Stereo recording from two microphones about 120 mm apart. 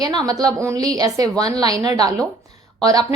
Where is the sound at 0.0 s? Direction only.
35° right (ahead or behind).